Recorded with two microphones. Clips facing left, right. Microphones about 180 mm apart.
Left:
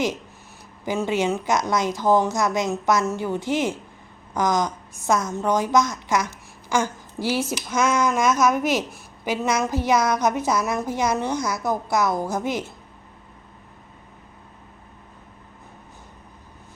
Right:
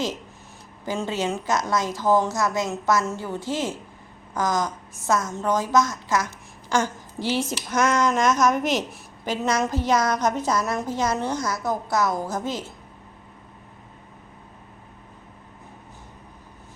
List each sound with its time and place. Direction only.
0.9 s speech: 15° left (ahead or behind)